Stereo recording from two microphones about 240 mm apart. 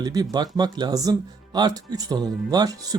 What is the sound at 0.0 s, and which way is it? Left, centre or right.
Speech, centre.